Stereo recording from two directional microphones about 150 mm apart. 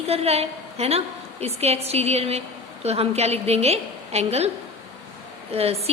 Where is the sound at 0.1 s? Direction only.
45° right (ahead or behind).